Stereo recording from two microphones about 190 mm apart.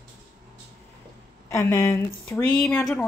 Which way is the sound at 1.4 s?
15° left (ahead or behind).